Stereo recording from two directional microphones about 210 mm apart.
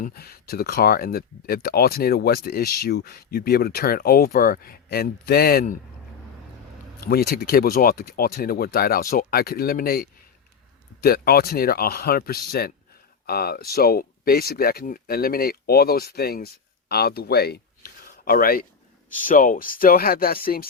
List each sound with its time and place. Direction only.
0.0 s speech: 45° left (ahead or behind)
7.0 s speech: 45° left (ahead or behind)